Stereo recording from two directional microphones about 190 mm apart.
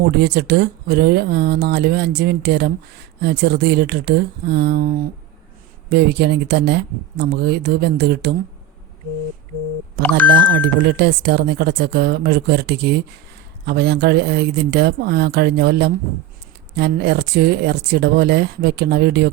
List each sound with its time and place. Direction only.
0.1 s speech: 60° right (ahead or behind)
10.0 s speech: 10° left (ahead or behind)
10.2 s speech: 70° right (ahead or behind)